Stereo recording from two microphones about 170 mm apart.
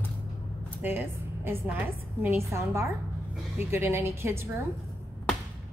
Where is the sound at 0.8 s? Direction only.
15° right (ahead or behind).